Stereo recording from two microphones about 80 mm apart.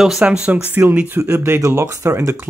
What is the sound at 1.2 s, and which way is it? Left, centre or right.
Speech, right.